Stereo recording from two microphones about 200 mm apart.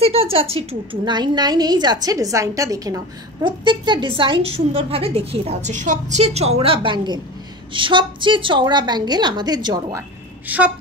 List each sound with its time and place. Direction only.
0.0 s a sound: 30° right (ahead or behind)
0.7 s a woman's voice: 20° right (ahead or behind)
10.5 s a woman's voice: 10° right (ahead or behind)